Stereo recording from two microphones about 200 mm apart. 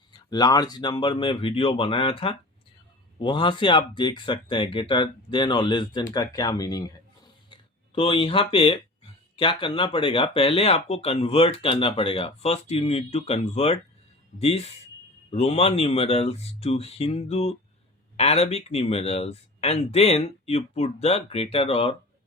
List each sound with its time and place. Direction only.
0.1 s speech: 20° left (ahead or behind)